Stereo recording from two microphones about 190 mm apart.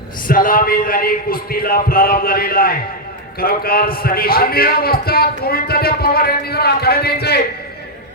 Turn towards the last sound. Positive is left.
turn(degrees=55)  # may be behind; listen again after turning